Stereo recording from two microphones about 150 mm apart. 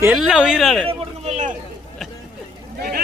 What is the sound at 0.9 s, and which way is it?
Speech, 45° right (ahead or behind).